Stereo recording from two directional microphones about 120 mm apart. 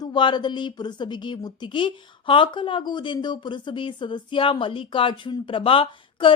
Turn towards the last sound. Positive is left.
turn(degrees=45)  # may be behind; listen again after turning